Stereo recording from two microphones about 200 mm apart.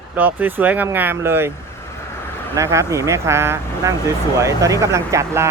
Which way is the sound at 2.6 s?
15° right (ahead or behind).